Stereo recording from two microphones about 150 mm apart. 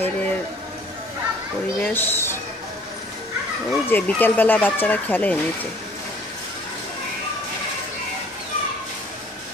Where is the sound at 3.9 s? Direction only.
15° left (ahead or behind).